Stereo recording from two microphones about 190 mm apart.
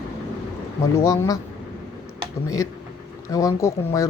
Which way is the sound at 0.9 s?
15° left (ahead or behind).